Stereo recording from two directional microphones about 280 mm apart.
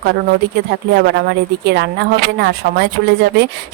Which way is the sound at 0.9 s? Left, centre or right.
Right.